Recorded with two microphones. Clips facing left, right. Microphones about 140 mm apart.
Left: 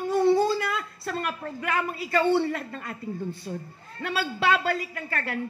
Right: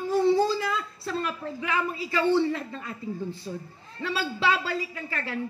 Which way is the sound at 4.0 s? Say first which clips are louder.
Left 1 dB; 55° left (ahead or behind).